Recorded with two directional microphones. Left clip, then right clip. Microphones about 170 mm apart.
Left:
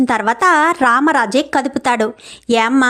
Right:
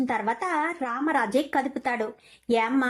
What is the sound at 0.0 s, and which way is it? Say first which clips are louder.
A woman's voice: left 13 dB; 45° left (ahead or behind).